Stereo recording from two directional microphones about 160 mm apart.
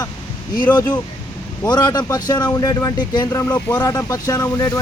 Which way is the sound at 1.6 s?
25° left (ahead or behind).